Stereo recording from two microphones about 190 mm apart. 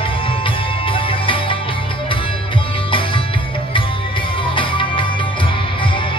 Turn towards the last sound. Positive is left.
turn(degrees=25)  # may be behind; listen again after turning